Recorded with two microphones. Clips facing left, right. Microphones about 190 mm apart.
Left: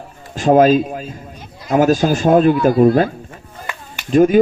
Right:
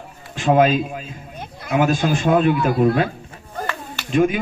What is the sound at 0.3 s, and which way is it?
Speech, 40° left (ahead or behind).